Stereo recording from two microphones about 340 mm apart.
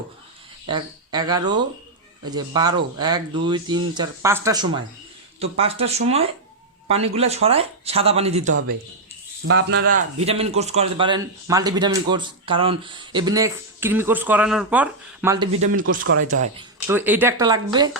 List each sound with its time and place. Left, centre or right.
0.7 s speech: centre
9.5 s speech: right
9.9 s speech: centre
15.8 s speech: right
16.8 s speech: centre